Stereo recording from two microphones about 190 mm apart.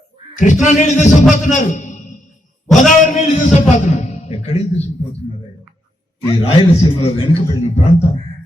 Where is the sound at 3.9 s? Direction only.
35° left (ahead or behind).